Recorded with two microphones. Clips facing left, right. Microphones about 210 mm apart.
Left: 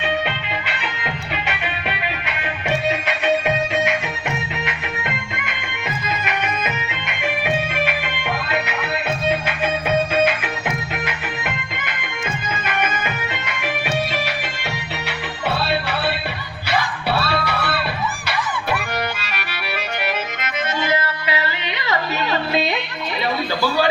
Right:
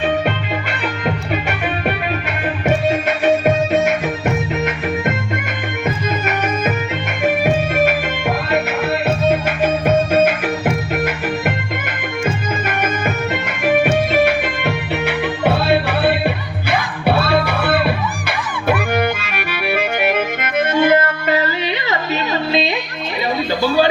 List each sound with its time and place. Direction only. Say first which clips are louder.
0.7 s music: right 7 dB; 45° right (ahead or behind)
13.3 s music: right 10 dB; 50° right (ahead or behind)
19.2 s music: right 7 dB; 55° right (ahead or behind)